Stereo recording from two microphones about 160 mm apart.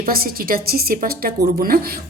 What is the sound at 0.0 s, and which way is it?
A woman's voice, 65° right (ahead or behind).